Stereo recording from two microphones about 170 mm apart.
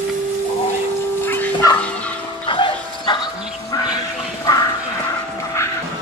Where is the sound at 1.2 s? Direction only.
10° left (ahead or behind).